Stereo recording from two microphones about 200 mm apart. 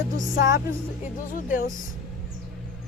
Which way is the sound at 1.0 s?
40° left (ahead or behind).